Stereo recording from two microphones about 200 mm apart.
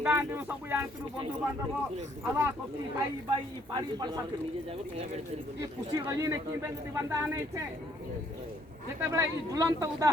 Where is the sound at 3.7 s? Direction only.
20° right (ahead or behind).